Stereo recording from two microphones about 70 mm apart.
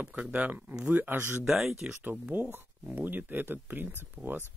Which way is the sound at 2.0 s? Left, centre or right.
Right.